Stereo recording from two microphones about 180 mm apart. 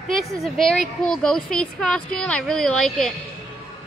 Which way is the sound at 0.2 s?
Centre (ahead or behind).